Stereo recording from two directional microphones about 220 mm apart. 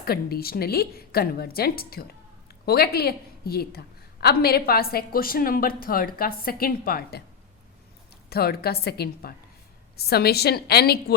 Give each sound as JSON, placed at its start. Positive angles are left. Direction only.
{"t": 0.0, "sound": "a woman's voice", "side_deg": 45}
{"t": 8.3, "sound": "a woman's voice", "side_deg": 45}